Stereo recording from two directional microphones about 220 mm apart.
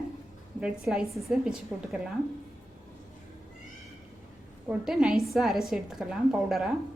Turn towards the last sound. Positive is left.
turn(degrees=0)  # may be behind; listen again after turning